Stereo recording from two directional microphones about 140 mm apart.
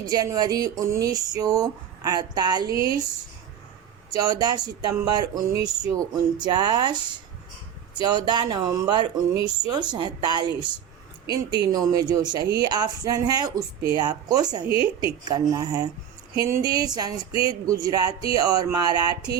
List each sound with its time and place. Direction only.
0.1 s speech: 30° right (ahead or behind)
4.1 s speech: 25° right (ahead or behind)
8.0 s speech: 30° right (ahead or behind)
14.7 s a woman's voice: 40° left (ahead or behind)
15.2 s speech: 30° right (ahead or behind)